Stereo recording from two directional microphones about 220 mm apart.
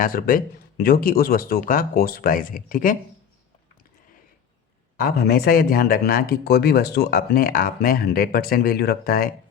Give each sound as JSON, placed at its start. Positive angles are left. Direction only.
{"t": 0.0, "sound": "speech", "side_deg": 40}
{"t": 4.9, "sound": "speech", "side_deg": 45}